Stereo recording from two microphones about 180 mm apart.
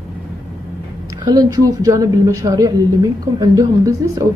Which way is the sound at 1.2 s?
20° right (ahead or behind).